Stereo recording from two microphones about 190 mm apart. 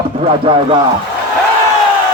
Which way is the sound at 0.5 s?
30° right (ahead or behind).